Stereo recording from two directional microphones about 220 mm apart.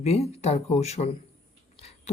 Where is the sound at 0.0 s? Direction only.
30° left (ahead or behind).